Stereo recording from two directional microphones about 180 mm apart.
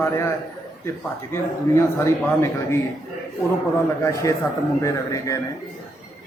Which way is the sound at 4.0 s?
15° left (ahead or behind).